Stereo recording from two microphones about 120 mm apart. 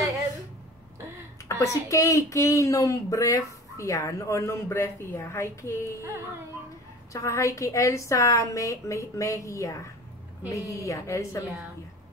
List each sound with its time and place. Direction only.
1.5 s speech: 25° left (ahead or behind)
7.1 s speech: 25° left (ahead or behind)